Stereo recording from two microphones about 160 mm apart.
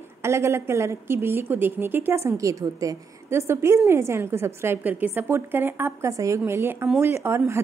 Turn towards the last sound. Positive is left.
turn(degrees=-15)  # may be behind; listen again after turning